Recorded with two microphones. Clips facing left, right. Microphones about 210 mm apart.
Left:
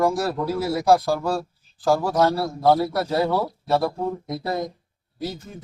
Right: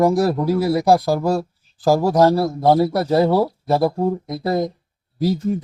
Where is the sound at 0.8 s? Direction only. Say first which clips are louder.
Right 3 dB; 35° right (ahead or behind).